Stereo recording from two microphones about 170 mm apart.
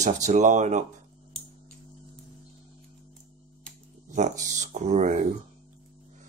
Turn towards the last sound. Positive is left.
turn(degrees=-45)  # may be behind; listen again after turning